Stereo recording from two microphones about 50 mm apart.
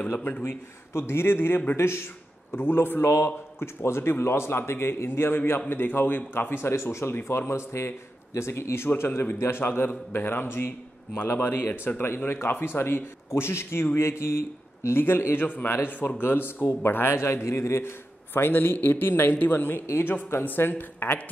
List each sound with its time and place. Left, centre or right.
0.1 s a man's voice: left
15.3 s a man's voice: left